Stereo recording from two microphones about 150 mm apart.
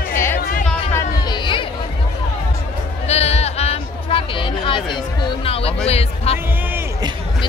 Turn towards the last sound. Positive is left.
turn(degrees=45)  # may be behind; listen again after turning